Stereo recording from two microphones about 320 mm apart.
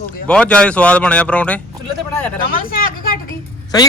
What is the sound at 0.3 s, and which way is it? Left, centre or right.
Speech, centre.